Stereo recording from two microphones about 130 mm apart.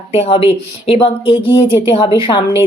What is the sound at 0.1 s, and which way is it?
Speech, 50° left (ahead or behind).